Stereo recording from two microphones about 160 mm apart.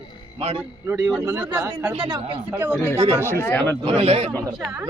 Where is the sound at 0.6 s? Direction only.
15° right (ahead or behind).